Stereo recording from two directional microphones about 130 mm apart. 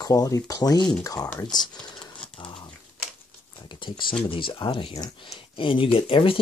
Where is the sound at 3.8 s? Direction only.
40° left (ahead or behind).